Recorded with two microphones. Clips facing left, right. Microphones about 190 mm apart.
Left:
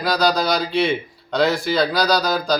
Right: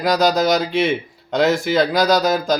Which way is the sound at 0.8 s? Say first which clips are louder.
Right 1 dB; 20° right (ahead or behind).